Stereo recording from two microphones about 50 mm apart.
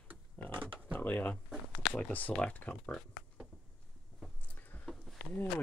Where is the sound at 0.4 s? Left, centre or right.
Left.